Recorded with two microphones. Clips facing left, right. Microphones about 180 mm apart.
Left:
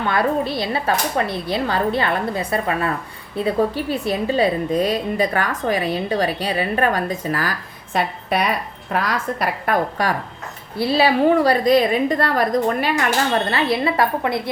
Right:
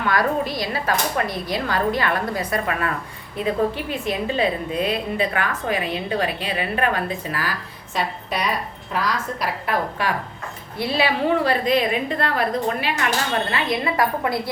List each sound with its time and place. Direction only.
0.1 s a woman's voice: 30° left (ahead or behind)
7.9 s a woman's voice: 55° left (ahead or behind)
10.8 s a woman's voice: 35° left (ahead or behind)
13.5 s speech: 30° left (ahead or behind)